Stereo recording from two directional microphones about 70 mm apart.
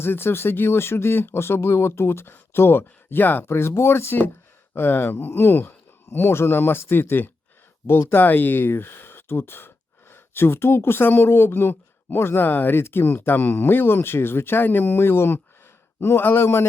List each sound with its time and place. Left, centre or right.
0.0 s speech: left
3.4 s speech: left